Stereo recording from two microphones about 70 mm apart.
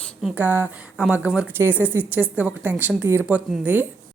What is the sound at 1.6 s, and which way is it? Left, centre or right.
A woman's voice, right.